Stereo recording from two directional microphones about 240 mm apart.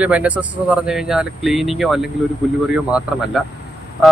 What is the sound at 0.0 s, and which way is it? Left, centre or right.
Speech, centre.